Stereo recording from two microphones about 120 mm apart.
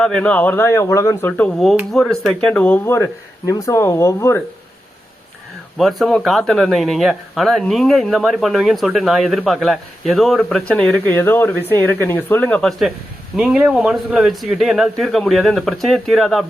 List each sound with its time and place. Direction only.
0.0 s a man's voice: 10° left (ahead or behind)
1.3 s a man's voice: 5° left (ahead or behind); by 4.4 s 25° left (ahead or behind)
5.7 s speech: centre (ahead or behind)
13.3 s speech: 5° right (ahead or behind)